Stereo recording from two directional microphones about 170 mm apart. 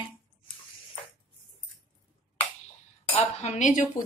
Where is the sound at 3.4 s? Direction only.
45° left (ahead or behind).